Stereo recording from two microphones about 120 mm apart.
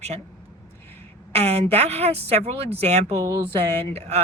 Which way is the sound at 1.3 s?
60° right (ahead or behind).